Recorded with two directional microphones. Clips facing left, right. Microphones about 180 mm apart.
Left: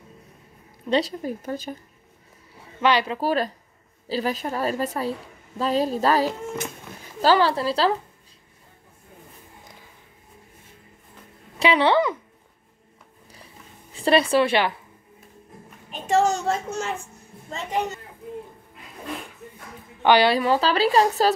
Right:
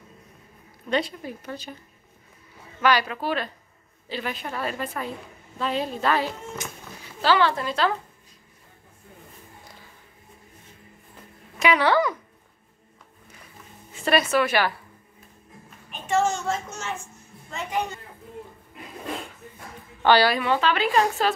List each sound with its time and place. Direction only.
0.8 s speech: 35° left (ahead or behind)
2.8 s a woman's voice: 25° left (ahead or behind)
3.2 s a woman's voice: 40° left (ahead or behind)
11.5 s a woman's voice: 30° left (ahead or behind)
13.9 s a woman's voice: 30° left (ahead or behind)
15.9 s a woman's voice: 40° left (ahead or behind)
20.0 s a woman's voice: 20° left (ahead or behind)
20.3 s a woman's voice: 35° left (ahead or behind)